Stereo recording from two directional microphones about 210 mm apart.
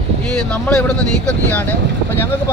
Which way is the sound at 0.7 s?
5° left (ahead or behind).